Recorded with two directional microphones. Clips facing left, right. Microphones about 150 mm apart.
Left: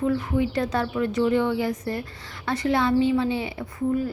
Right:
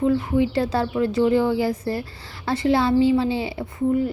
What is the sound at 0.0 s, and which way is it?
Speech, 25° right (ahead or behind).